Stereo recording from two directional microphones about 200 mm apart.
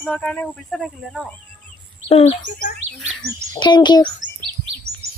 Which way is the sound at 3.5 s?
20° left (ahead or behind).